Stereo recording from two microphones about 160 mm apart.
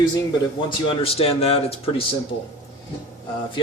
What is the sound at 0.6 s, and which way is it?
Speech, 35° left (ahead or behind).